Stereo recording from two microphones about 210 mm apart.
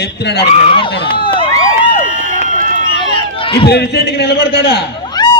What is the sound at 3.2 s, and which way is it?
Run, 25° left (ahead or behind).